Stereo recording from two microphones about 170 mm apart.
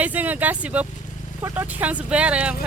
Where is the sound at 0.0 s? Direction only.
10° right (ahead or behind).